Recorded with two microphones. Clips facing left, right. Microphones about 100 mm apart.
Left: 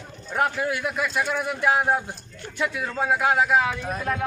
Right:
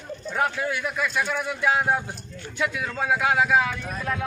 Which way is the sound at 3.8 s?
25° left (ahead or behind).